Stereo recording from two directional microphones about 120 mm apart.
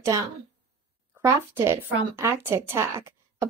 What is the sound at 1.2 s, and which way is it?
Speech, 20° right (ahead or behind).